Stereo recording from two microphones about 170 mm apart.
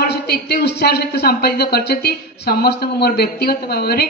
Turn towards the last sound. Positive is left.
turn(degrees=70)  # may be behind; listen again after turning